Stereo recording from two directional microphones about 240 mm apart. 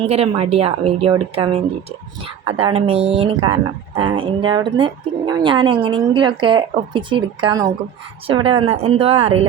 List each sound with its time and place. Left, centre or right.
0.0 s speech: right